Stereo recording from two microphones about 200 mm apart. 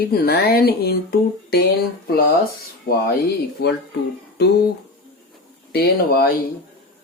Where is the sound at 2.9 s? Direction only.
50° left (ahead or behind).